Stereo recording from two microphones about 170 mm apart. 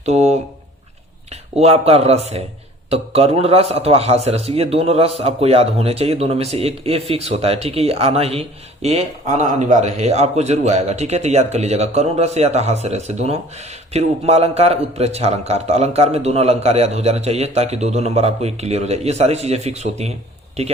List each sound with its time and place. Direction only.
0.0 s speech: 40° right (ahead or behind)
1.5 s a man's voice: 35° right (ahead or behind)